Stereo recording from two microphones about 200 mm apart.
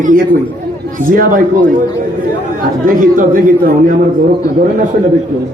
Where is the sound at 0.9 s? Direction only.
45° right (ahead or behind).